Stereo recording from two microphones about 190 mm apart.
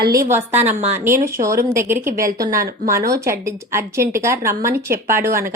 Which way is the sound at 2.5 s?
45° right (ahead or behind).